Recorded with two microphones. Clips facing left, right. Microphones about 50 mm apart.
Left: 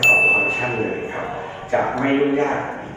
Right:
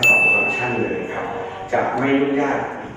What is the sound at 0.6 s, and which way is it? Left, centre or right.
A man's voice, right.